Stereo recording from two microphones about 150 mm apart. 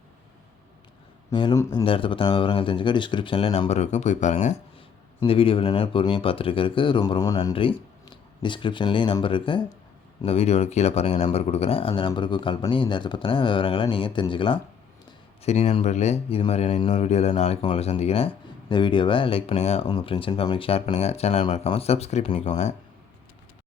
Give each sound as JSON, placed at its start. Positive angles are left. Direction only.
{"t": 1.3, "sound": "speech", "side_deg": 30}
{"t": 5.2, "sound": "speech", "side_deg": 35}
{"t": 7.5, "sound": "speech", "side_deg": 35}
{"t": 15.4, "sound": "speech", "side_deg": 45}
{"t": 16.9, "sound": "speech", "side_deg": 45}
{"t": 19.9, "sound": "speech", "side_deg": 35}